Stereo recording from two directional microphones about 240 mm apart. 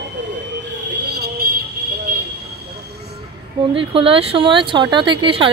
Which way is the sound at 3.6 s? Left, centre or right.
Right.